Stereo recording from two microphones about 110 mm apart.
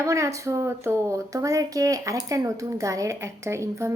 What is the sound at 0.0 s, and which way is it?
A woman's voice, 30° right (ahead or behind).